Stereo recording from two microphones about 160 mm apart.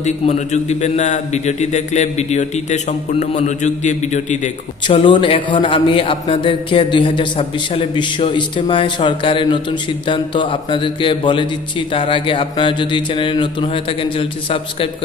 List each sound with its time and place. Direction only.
0.0 s a man's voice: 45° left (ahead or behind)
4.8 s a man's voice: 30° left (ahead or behind)